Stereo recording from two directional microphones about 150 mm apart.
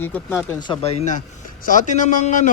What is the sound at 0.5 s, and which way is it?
A man's voice, 30° left (ahead or behind).